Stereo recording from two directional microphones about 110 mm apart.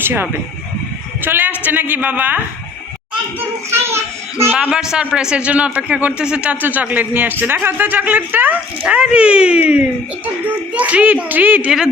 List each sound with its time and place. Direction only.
0.0 s a man's voice: 20° right (ahead or behind)
3.8 s a child's voice: 25° right (ahead or behind)
4.6 s a man's voice: 5° right (ahead or behind)